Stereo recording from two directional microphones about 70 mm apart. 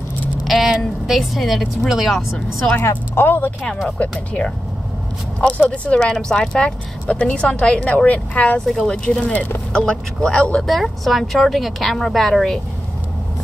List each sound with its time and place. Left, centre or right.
0.5 s vehicle: centre
2.8 s speech: left
3.3 s speech: left
4.0 s a woman's voice: centre
5.4 s a woman's voice: centre
8.5 s a woman's voice: centre
8.9 s a woman's voice: centre
10.6 s a woman's voice: centre